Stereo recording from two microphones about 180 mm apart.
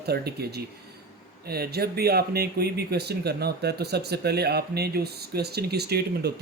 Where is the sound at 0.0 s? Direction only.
60° right (ahead or behind).